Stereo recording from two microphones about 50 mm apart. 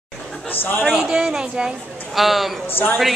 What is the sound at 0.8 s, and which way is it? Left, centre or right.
Speech, centre.